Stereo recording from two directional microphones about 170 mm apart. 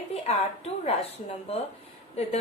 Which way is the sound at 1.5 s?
35° left (ahead or behind).